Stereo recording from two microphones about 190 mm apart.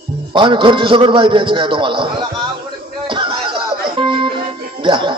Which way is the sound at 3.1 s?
25° right (ahead or behind).